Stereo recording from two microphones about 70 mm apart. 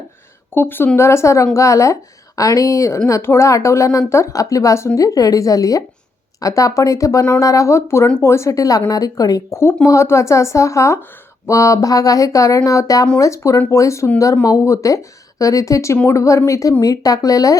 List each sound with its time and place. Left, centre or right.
0.5 s a woman's voice: left
3.1 s a woman's voice: left
9.5 s a woman's voice: left
16.8 s speech: left